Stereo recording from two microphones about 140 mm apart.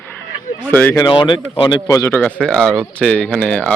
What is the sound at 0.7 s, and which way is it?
Speech, 10° left (ahead or behind).